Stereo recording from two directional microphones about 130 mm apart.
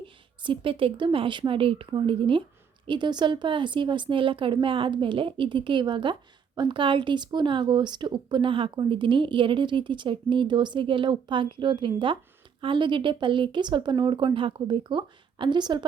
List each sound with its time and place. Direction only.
0.0 s a woman's voice: 40° right (ahead or behind)